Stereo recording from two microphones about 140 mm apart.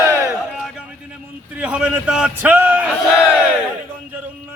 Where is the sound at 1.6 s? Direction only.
10° right (ahead or behind).